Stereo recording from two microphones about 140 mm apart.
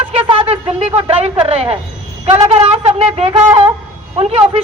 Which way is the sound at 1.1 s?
45° right (ahead or behind).